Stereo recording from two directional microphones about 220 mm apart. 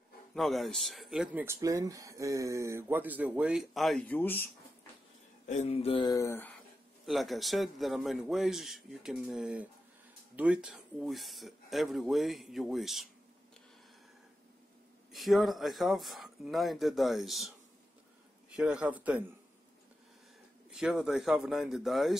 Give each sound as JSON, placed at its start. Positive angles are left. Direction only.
{"t": 0.3, "sound": "speech", "side_deg": 0}
{"t": 5.5, "sound": "a sound", "side_deg": 30}
{"t": 7.1, "sound": "speech", "side_deg": 0}
{"t": 15.1, "sound": "speech", "side_deg": 0}
{"t": 18.6, "sound": "speech", "side_deg": -5}
{"t": 20.7, "sound": "speech", "side_deg": 0}